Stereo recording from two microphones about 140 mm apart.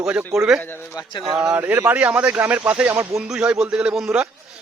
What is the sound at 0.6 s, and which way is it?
Speech, 15° left (ahead or behind).